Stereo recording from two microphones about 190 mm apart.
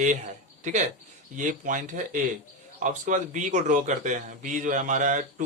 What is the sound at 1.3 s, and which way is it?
A man's voice, 45° right (ahead or behind).